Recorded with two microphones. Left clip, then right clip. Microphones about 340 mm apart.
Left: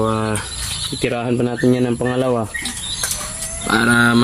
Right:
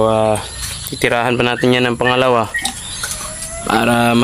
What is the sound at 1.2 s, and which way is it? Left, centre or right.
Speech, right.